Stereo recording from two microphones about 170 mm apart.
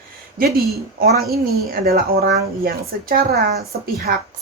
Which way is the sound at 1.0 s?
65° right (ahead or behind).